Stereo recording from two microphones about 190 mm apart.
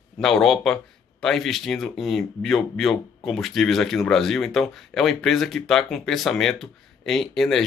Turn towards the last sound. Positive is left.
turn(degrees=0)  # may be behind; listen again after turning